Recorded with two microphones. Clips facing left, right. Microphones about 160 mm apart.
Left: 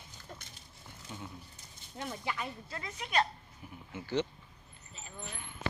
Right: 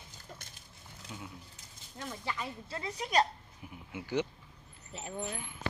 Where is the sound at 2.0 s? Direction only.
15° left (ahead or behind).